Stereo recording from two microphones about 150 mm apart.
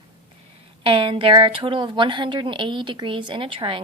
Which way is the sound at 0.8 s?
35° right (ahead or behind).